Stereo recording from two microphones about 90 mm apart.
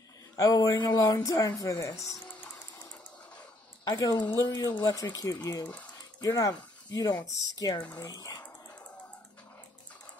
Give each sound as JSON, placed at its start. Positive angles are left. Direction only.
{"t": 0.4, "sound": "speech", "side_deg": 45}
{"t": 3.8, "sound": "speech", "side_deg": 45}